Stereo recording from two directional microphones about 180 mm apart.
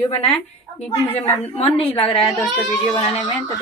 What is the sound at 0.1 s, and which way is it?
A woman's voice, 35° left (ahead or behind).